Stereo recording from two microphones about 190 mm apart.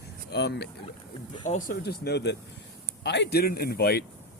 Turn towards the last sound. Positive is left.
turn(degrees=55)  # may be behind; listen again after turning